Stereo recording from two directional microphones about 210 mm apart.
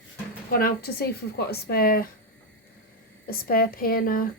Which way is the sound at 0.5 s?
45° left (ahead or behind).